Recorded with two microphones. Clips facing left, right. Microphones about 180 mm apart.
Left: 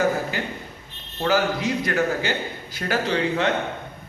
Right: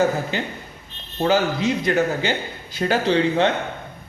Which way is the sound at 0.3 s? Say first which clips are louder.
Right 2 dB; 25° right (ahead or behind).